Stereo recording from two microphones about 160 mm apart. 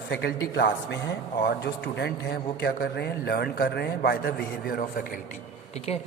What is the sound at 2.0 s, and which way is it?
A man's voice, 90° left.